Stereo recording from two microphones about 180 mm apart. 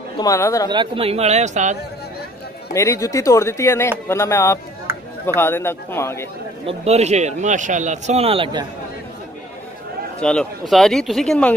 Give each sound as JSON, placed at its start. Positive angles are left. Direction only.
{"t": 0.2, "sound": "speech", "side_deg": 15}
{"t": 0.7, "sound": "speech", "side_deg": -30}
{"t": 2.7, "sound": "speech", "side_deg": 15}
{"t": 4.9, "sound": "a sound", "side_deg": -15}
{"t": 5.2, "sound": "speech", "side_deg": 10}
{"t": 6.6, "sound": "speech", "side_deg": -35}
{"t": 10.2, "sound": "speech", "side_deg": 5}